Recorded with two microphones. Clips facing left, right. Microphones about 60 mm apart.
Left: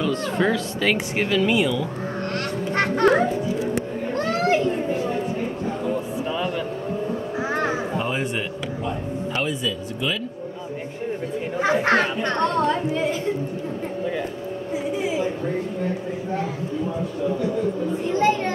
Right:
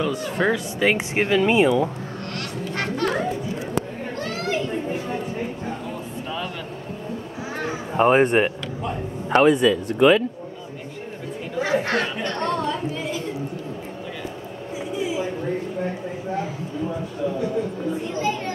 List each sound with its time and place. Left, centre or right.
0.0 s speech: centre; by 1.9 s right
2.3 s music: left
8.0 s speech: right
11.6 s speech: left